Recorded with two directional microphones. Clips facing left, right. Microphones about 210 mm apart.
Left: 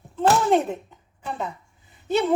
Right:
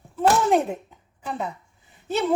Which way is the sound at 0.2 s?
5° right (ahead or behind).